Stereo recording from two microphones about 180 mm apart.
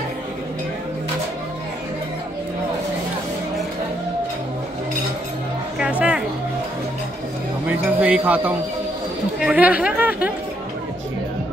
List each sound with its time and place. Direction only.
5.8 s music: 5° right (ahead or behind)
7.7 s music: 10° right (ahead or behind)
9.4 s speech: 5° right (ahead or behind)